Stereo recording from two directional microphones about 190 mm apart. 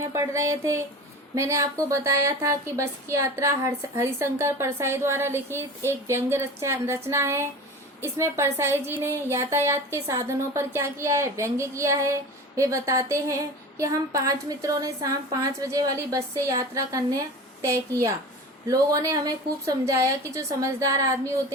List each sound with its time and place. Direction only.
0.1 s speech: 15° right (ahead or behind)
18.7 s speech: 20° right (ahead or behind)